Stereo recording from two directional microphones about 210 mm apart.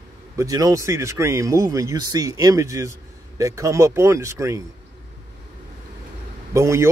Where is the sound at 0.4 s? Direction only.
15° right (ahead or behind).